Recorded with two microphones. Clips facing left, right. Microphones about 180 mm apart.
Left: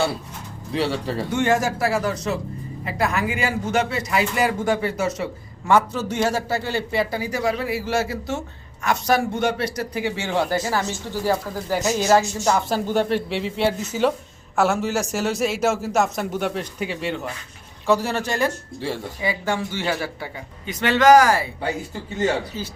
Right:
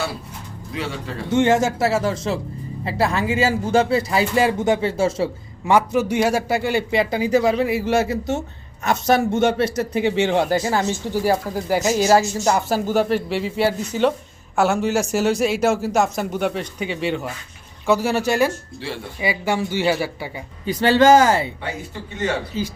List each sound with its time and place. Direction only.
0.7 s speech: 35° left (ahead or behind)
1.3 s speech: 20° right (ahead or behind)
5.7 s a man's voice: 15° right (ahead or behind)
20.7 s speech: 30° right (ahead or behind)